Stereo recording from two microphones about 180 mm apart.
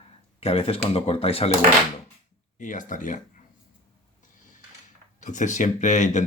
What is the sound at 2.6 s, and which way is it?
Speech, 45° left (ahead or behind).